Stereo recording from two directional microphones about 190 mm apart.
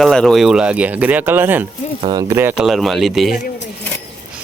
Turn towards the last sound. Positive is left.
turn(degrees=0)  # may be behind; listen again after turning